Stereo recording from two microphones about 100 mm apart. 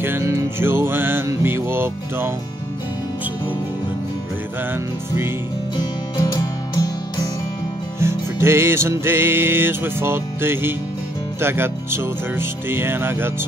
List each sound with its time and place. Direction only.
0.0 s music: 20° right (ahead or behind)
5.8 s music: 45° left (ahead or behind)
8.0 s music: 25° right (ahead or behind)